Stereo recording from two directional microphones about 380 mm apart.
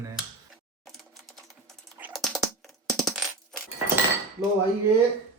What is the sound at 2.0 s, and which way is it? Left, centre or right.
Coin, centre.